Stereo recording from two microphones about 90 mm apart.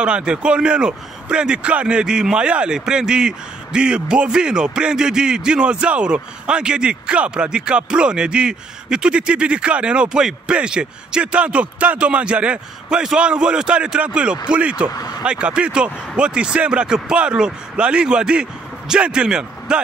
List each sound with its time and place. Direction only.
0.0 s a man's voice: 10° right (ahead or behind)
15.0 s speech: 45° left (ahead or behind)
15.2 s a man's voice: 10° right (ahead or behind)